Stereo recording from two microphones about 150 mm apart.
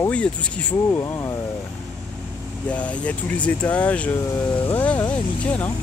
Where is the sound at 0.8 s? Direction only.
20° left (ahead or behind).